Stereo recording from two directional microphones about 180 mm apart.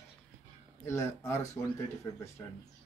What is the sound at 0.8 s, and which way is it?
Speech, 15° left (ahead or behind).